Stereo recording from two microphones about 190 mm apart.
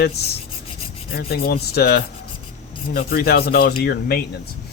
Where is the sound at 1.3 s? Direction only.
55° left (ahead or behind).